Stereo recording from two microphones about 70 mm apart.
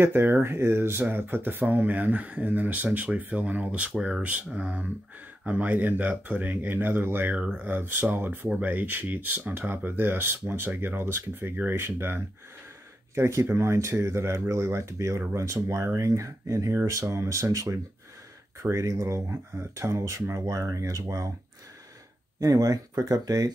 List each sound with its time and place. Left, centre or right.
0.0 s speech: right
7.3 s speech: centre; by 21.0 s right
22.4 s speech: right